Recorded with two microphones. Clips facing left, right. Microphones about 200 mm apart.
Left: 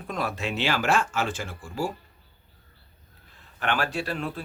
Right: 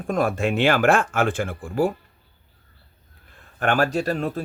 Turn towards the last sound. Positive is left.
turn(degrees=-40)  # may be behind; listen again after turning